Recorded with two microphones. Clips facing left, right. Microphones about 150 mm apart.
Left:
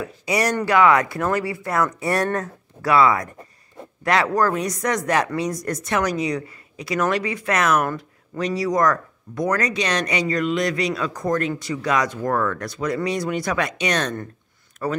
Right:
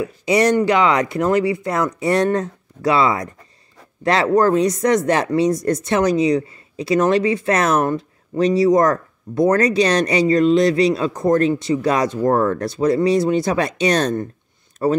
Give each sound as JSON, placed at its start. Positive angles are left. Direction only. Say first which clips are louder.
{"t": 0.2, "sound": "speech", "louder": "right 7 dB", "side_deg": -25}